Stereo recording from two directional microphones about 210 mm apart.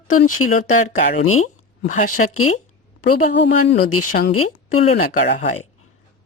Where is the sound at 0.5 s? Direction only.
40° left (ahead or behind).